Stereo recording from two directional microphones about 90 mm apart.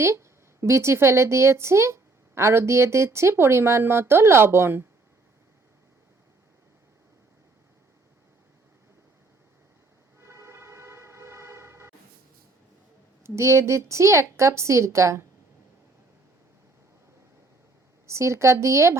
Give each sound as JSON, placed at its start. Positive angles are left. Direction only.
{"t": 0.0, "sound": "a woman's voice", "side_deg": -30}
{"t": 10.2, "sound": "a sound", "side_deg": -30}
{"t": 13.2, "sound": "speech", "side_deg": -35}
{"t": 18.0, "sound": "speech", "side_deg": -30}